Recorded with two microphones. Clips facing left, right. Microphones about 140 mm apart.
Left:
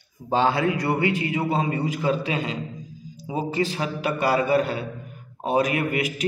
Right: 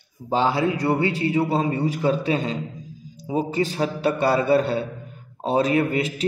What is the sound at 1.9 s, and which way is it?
A man's voice, 40° right (ahead or behind).